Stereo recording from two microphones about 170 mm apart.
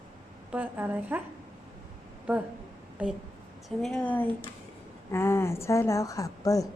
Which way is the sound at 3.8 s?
5° left (ahead or behind).